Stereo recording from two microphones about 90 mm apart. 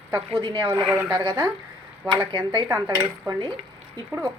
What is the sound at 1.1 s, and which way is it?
Speech, 50° right (ahead or behind).